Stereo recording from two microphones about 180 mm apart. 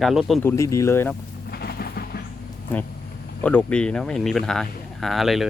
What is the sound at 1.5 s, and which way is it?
Music, 60° left (ahead or behind).